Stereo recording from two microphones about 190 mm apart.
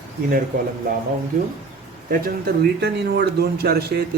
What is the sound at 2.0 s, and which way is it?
Speech, 50° right (ahead or behind).